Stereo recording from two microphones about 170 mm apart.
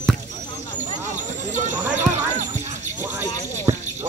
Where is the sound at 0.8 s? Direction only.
45° right (ahead or behind).